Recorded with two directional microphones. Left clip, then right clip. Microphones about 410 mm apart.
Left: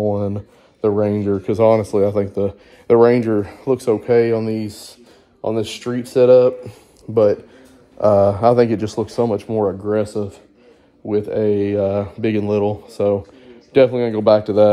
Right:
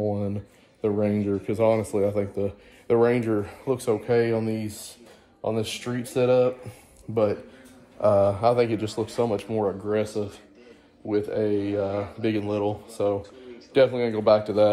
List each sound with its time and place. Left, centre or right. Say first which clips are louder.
0.1 s speech: left 8 dB; centre
8.0 s speech: left 7 dB; left
11.1 s speech: left 7 dB; centre